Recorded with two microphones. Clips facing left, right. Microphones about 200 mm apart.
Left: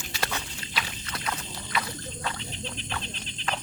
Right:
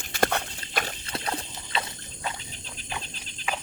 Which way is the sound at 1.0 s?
30° right (ahead or behind).